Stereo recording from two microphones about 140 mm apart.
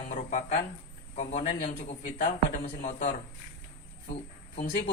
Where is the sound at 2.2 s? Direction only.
85° left; by 3.1 s 60° left (ahead or behind).